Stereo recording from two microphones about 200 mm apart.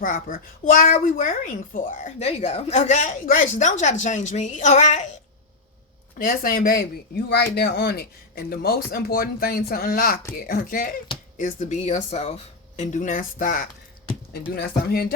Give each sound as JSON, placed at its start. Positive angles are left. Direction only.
{"t": 0.0, "sound": "a woman's voice", "side_deg": 45}
{"t": 6.1, "sound": "a woman's voice", "side_deg": 45}